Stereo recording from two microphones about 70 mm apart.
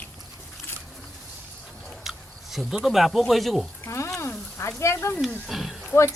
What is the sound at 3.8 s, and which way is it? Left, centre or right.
Speech, left.